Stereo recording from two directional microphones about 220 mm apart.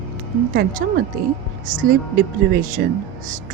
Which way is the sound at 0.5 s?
45° right (ahead or behind).